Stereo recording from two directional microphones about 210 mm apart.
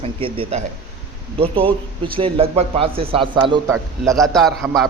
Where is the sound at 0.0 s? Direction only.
25° right (ahead or behind).